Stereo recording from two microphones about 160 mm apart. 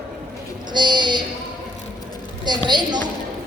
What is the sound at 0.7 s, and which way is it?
Speech, 30° right (ahead or behind).